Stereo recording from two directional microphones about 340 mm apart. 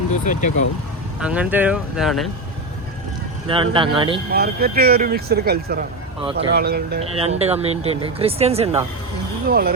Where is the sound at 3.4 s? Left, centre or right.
Centre.